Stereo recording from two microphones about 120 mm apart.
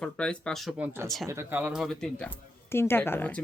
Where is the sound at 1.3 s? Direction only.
20° right (ahead or behind).